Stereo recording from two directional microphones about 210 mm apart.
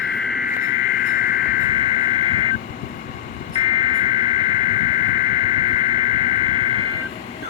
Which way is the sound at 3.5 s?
20° right (ahead or behind).